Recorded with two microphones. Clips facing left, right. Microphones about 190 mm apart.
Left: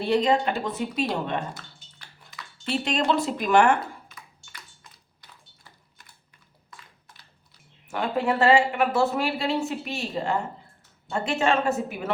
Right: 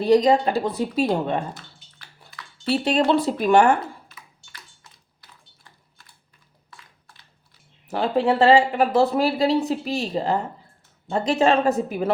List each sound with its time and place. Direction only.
0.0 s speech: 35° right (ahead or behind)
2.8 s speech: 35° right (ahead or behind)
7.9 s speech: 30° right (ahead or behind)